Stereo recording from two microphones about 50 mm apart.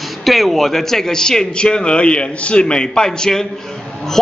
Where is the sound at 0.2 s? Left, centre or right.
Centre.